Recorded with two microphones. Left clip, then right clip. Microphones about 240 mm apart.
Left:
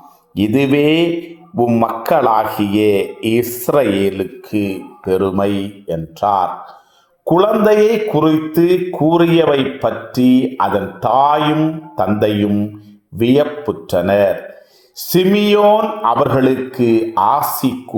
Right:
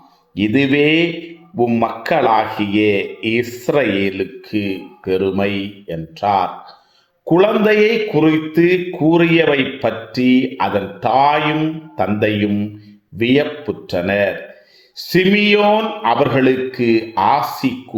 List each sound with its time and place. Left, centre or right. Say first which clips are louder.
0.3 s speech: left 1 dB; left